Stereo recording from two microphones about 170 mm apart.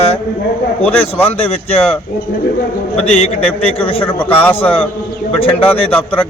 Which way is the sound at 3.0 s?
35° left (ahead or behind).